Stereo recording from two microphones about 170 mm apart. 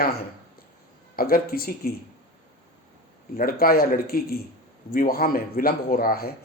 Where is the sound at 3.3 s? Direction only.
60° left (ahead or behind).